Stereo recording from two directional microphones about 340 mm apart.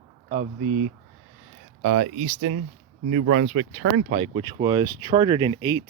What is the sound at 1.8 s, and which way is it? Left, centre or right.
Speech, right.